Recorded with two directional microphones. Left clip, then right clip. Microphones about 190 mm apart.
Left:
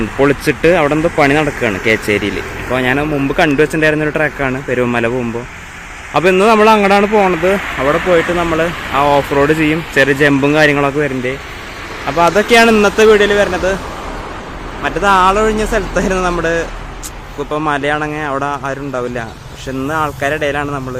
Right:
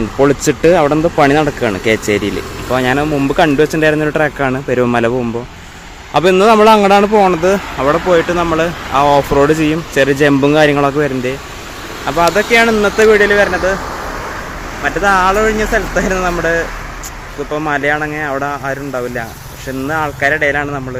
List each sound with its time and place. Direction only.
0.2 s a man's voice: 5° right (ahead or behind)
12.5 s speech: 50° left (ahead or behind)
12.8 s speech: 20° left (ahead or behind)
14.8 s speech: 15° left (ahead or behind)
17.5 s speech: 15° left (ahead or behind)